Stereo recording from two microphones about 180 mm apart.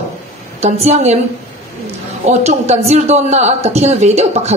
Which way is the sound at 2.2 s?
40° right (ahead or behind).